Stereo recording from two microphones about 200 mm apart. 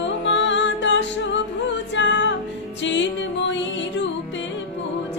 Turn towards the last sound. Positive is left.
turn(degrees=65)  # may be behind; listen again after turning